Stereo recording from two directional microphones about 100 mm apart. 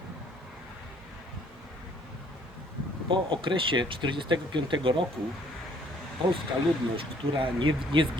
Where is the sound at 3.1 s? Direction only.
55° right (ahead or behind).